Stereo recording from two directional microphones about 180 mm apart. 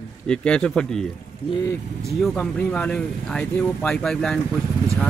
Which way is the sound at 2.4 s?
5° left (ahead or behind).